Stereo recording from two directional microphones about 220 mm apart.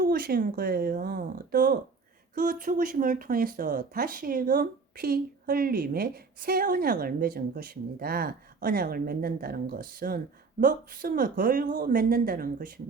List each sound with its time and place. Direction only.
0.0 s speech: 40° right (ahead or behind)